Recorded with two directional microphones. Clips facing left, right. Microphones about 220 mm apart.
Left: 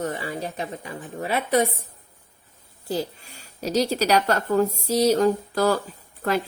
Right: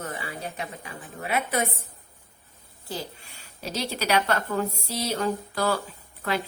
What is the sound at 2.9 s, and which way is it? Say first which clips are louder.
A woman's voice: left 8 dB; 40° left (ahead or behind).